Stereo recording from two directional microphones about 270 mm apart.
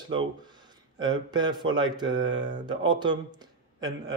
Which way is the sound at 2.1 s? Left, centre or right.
Right.